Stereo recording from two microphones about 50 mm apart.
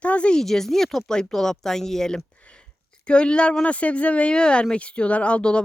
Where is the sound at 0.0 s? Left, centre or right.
Left.